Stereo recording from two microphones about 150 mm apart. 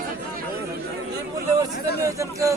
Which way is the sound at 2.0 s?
20° right (ahead or behind).